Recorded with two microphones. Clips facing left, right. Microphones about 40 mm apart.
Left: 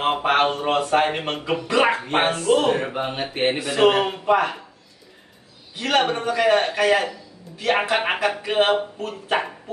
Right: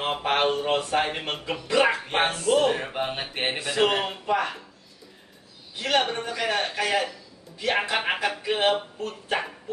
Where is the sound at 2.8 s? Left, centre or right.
Centre.